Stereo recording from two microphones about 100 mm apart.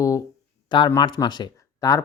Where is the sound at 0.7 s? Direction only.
45° left (ahead or behind).